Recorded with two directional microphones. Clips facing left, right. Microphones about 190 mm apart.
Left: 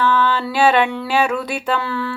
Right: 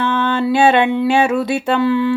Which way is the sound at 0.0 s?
25° right (ahead or behind).